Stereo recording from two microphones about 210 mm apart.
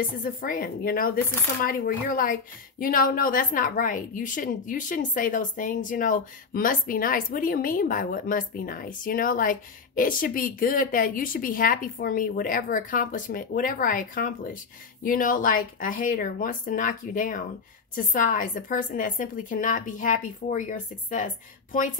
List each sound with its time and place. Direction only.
0.2 s a woman's voice: 40° left (ahead or behind)